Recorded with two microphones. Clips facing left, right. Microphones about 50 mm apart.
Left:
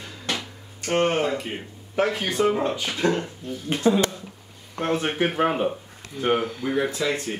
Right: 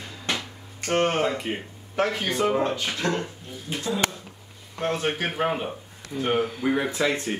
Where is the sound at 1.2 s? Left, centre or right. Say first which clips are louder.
Even; centre.